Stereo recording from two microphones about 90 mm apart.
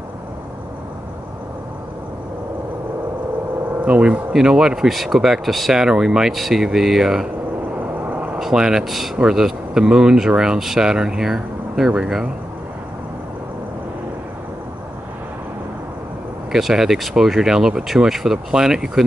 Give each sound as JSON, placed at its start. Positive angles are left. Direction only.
{"t": 3.8, "sound": "speech", "side_deg": -15}
{"t": 8.0, "sound": "vehicle", "side_deg": -15}
{"t": 8.4, "sound": "speech", "side_deg": -5}
{"t": 16.5, "sound": "speech", "side_deg": -5}